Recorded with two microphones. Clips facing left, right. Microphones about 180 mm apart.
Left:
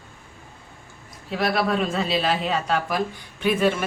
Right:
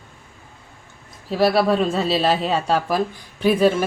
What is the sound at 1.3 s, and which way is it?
Speech, 35° right (ahead or behind).